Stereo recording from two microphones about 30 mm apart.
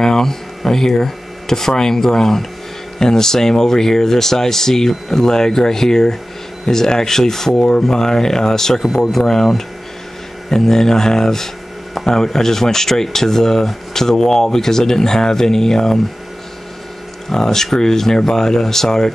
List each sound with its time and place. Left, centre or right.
0.0 s a sound: centre
0.7 s speech: centre
7.5 s speech: left
17.3 s speech: centre